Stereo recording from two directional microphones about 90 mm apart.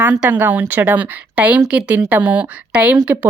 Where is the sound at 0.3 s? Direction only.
20° right (ahead or behind).